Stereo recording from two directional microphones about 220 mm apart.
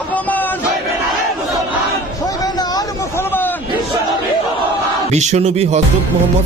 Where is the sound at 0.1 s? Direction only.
5° left (ahead or behind).